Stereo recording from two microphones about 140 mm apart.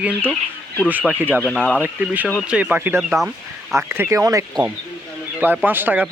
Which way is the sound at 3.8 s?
20° right (ahead or behind).